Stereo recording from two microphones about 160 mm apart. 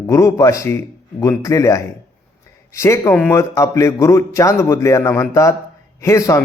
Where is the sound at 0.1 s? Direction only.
20° left (ahead or behind).